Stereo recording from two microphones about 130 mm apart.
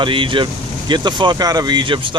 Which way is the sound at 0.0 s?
40° right (ahead or behind).